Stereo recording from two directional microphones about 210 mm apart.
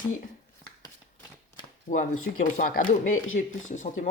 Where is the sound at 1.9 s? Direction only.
40° left (ahead or behind).